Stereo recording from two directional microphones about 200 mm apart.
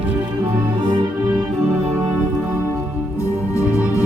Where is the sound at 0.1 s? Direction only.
25° right (ahead or behind).